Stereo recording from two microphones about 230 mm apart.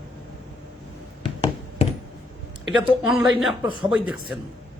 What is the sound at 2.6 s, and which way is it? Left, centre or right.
Speech, centre.